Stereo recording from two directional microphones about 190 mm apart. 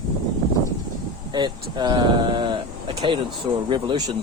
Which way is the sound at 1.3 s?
25° right (ahead or behind).